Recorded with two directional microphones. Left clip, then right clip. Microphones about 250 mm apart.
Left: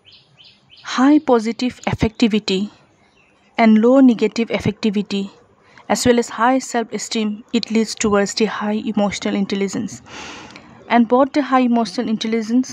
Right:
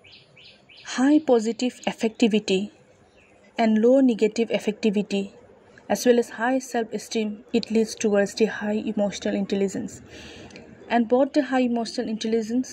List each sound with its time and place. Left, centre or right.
0.8 s speech: centre
3.5 s speech: centre
10.9 s speech: centre